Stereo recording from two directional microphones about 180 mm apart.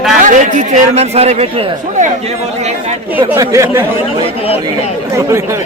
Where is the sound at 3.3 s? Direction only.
15° right (ahead or behind).